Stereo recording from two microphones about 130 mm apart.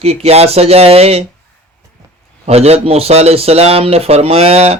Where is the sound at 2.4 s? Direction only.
55° right (ahead or behind).